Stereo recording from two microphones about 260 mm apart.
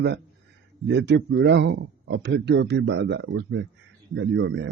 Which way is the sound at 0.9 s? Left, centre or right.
Right.